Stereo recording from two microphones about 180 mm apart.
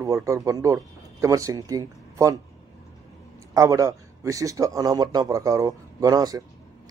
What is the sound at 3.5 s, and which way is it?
A man's voice, 20° right (ahead or behind).